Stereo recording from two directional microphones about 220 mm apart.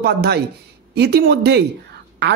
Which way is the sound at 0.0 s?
45° right (ahead or behind).